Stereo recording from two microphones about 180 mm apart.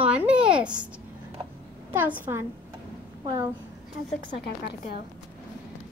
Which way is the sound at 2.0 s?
10° right (ahead or behind).